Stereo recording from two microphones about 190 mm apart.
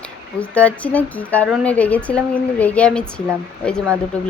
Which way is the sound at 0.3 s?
5° left (ahead or behind).